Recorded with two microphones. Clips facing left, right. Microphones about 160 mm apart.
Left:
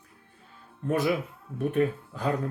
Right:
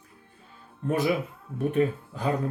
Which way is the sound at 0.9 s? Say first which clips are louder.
Right 1 dB; 20° right (ahead or behind).